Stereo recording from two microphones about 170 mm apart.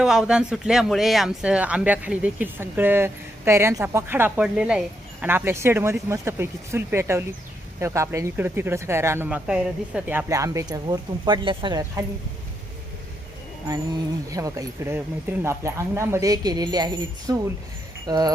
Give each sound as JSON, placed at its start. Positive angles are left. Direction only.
{"t": 0.0, "sound": "speech", "side_deg": -5}
{"t": 14.3, "sound": "speech", "side_deg": -20}